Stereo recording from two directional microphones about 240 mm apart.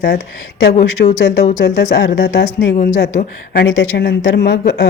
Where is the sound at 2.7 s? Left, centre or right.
Left.